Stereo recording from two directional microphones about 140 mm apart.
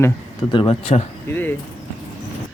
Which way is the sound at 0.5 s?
40° left (ahead or behind).